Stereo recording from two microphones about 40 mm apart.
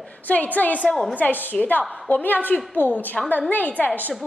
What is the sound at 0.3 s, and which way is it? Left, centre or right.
Speech, left.